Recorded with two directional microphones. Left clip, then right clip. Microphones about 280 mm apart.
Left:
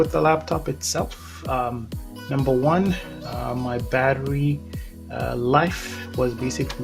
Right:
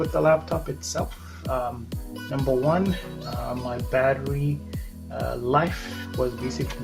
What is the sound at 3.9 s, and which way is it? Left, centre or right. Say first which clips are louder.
Speech: left 1 dB; left.